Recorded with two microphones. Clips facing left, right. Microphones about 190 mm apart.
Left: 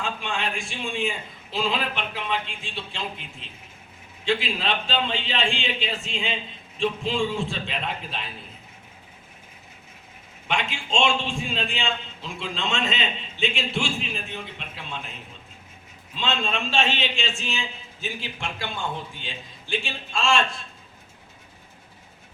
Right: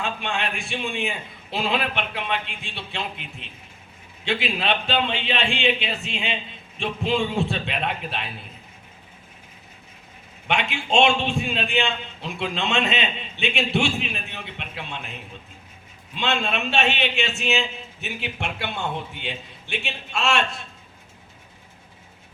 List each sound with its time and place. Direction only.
0.0 s a man's voice: 60° right (ahead or behind)
10.5 s a man's voice: 65° right (ahead or behind)
16.1 s a man's voice: 70° right (ahead or behind)